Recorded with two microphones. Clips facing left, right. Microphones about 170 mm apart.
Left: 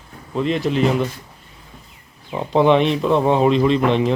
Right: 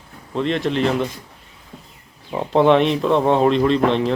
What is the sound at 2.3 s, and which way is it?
Speech, centre (ahead or behind).